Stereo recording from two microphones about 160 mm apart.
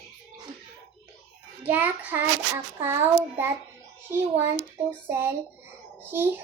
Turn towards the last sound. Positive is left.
turn(degrees=-15)  # may be behind; listen again after turning